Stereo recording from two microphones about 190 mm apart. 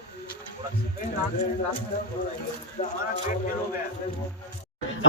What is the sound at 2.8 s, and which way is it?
Speech, 35° left (ahead or behind).